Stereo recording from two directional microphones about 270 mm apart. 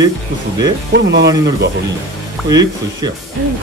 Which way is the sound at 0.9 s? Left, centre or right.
Right.